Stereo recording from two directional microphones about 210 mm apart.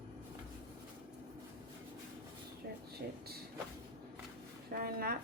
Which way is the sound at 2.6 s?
50° right (ahead or behind).